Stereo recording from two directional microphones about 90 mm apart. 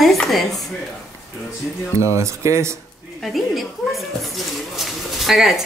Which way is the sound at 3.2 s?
Centre (ahead or behind).